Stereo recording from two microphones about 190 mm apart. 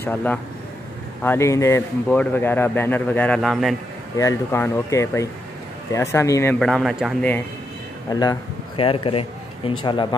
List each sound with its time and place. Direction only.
0.0 s a man's voice: 10° left (ahead or behind)
4.2 s a man's voice: 15° left (ahead or behind)
6.6 s speech: centre (ahead or behind)
8.1 s speech: 20° left (ahead or behind)